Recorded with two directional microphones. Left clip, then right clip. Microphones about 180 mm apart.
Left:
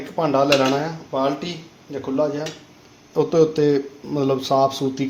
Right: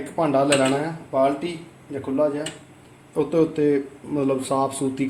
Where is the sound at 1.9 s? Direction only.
30° left (ahead or behind).